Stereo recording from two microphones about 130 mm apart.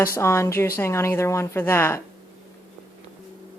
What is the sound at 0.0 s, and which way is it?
Speech, 20° left (ahead or behind).